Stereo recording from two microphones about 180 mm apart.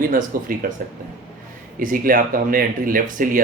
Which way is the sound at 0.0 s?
50° right (ahead or behind).